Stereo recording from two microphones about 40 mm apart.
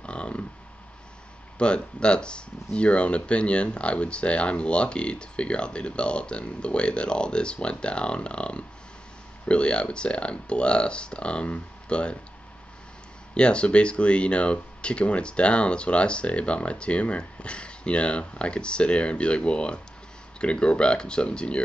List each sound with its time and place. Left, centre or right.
0.0 s a sound: left
1.6 s speech: left
13.3 s speech: left